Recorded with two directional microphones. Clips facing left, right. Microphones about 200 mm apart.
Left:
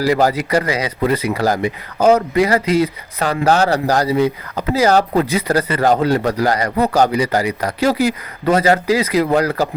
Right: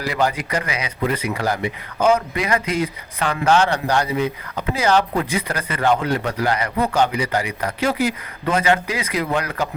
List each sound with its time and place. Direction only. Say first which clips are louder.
0.0 s speech: left 6 dB; 35° left (ahead or behind)